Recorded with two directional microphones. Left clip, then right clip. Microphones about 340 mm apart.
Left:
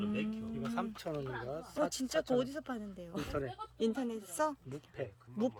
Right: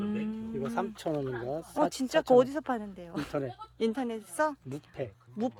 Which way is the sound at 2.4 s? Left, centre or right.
Centre.